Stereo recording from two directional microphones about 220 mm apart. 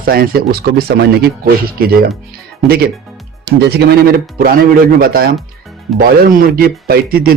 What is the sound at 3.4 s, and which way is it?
A man's voice, 50° right (ahead or behind).